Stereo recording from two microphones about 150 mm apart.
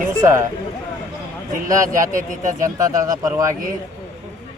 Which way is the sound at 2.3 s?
55° right (ahead or behind).